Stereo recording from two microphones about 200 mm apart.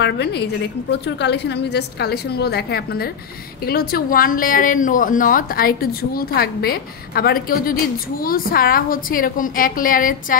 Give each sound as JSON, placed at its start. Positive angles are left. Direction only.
{"t": 0.0, "sound": "a woman's voice", "side_deg": 55}